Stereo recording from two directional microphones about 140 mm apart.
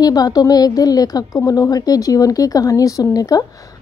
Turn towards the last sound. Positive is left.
turn(degrees=25)  # may be behind; listen again after turning